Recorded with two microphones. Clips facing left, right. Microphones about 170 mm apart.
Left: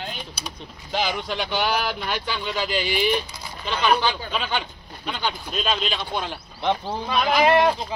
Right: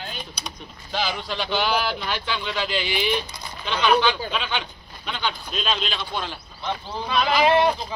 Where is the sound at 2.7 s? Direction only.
45° left (ahead or behind).